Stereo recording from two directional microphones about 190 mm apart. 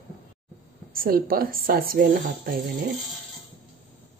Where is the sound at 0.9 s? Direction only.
50° right (ahead or behind).